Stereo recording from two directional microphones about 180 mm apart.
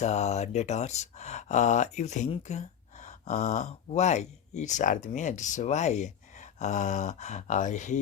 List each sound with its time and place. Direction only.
0.0 s speech: 40° left (ahead or behind)